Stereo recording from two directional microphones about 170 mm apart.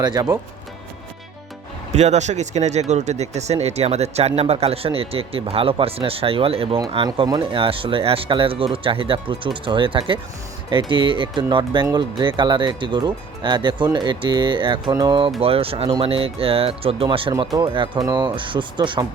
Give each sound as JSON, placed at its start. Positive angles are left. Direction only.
{"t": 0.0, "sound": "speech", "side_deg": -25}
{"t": 1.9, "sound": "speech", "side_deg": -40}